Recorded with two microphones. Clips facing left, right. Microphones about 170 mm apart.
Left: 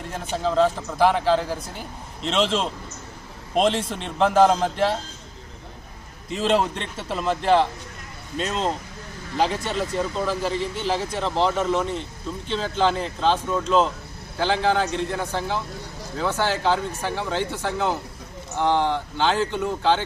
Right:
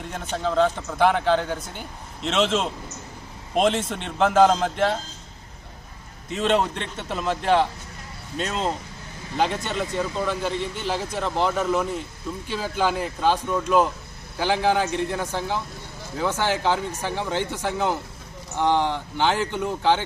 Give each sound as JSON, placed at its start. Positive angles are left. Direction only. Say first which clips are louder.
{"t": 0.0, "sound": "a man's voice", "louder": "left 1 dB", "side_deg": 0}
{"t": 6.3, "sound": "a man's voice", "louder": "even", "side_deg": 0}